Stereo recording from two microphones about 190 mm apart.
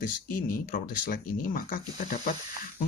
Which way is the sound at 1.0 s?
45° left (ahead or behind).